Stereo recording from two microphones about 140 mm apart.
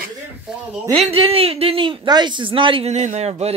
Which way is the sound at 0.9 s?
40° right (ahead or behind).